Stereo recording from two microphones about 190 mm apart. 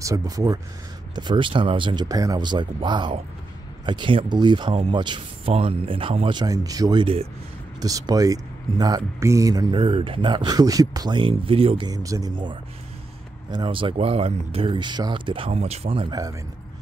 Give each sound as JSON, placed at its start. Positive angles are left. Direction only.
{"t": 0.0, "sound": "speech", "side_deg": -20}